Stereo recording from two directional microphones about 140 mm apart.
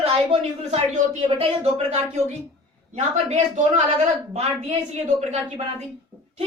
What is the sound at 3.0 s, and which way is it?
A woman's voice, 55° right (ahead or behind).